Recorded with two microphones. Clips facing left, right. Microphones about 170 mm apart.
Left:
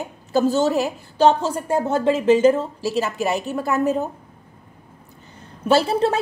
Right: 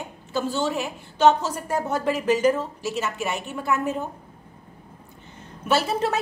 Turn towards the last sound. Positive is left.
turn(degrees=30)  # may be behind; listen again after turning